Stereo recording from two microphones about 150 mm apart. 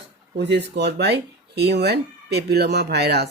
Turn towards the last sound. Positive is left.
turn(degrees=-90)